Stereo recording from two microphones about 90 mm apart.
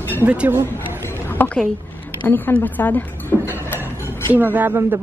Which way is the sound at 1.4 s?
20° left (ahead or behind).